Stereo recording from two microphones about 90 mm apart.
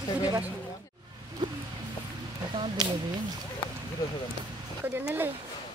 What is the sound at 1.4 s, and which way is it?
Music, 55° right (ahead or behind).